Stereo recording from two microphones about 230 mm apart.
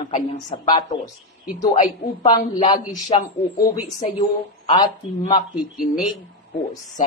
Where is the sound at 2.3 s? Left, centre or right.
Centre.